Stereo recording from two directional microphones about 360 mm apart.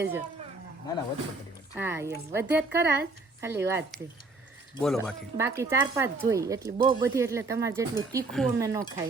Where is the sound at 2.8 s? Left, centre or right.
Right.